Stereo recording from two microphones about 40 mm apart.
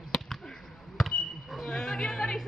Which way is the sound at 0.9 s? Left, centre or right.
Centre.